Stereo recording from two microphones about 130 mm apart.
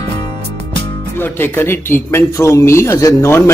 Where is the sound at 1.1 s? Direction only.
15° left (ahead or behind).